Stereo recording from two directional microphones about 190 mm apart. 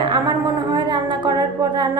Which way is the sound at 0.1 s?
25° right (ahead or behind).